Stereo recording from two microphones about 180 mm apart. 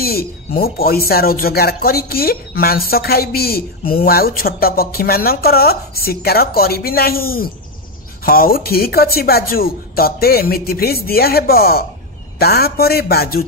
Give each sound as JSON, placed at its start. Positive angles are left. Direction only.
{"t": 0.0, "sound": "a woman's voice", "side_deg": 55}